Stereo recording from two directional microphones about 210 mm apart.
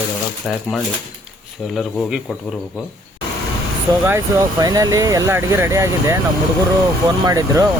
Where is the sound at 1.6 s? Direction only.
Centre (ahead or behind).